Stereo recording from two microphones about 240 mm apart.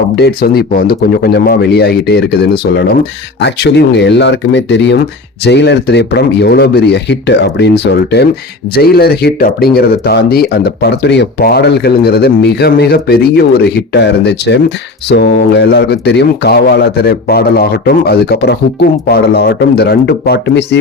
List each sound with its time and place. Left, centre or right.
0.2 s speech: left